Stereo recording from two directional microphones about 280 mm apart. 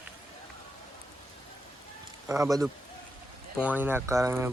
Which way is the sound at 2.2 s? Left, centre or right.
Centre.